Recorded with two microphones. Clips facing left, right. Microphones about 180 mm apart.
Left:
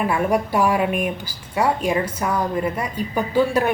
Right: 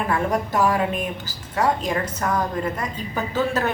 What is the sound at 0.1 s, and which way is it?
A woman's voice, 10° left (ahead or behind).